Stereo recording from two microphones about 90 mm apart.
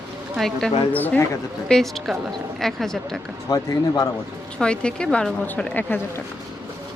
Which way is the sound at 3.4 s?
45° left (ahead or behind).